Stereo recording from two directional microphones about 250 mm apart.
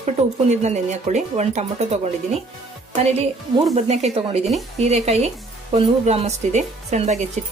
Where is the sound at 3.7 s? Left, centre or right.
Right.